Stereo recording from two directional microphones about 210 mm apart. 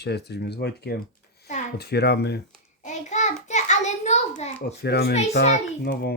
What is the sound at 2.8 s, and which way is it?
Child singing, 35° left (ahead or behind).